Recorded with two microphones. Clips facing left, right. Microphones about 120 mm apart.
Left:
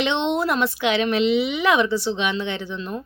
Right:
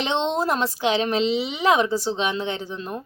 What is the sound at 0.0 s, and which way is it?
A woman's voice, 35° right (ahead or behind).